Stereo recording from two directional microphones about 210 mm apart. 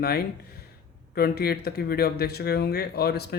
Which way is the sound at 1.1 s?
50° left (ahead or behind).